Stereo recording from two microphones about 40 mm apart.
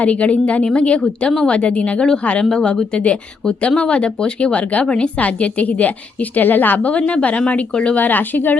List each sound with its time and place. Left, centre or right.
0.0 s a woman's voice: left
2.4 s a woman's voice: centre
7.9 s a woman's voice: left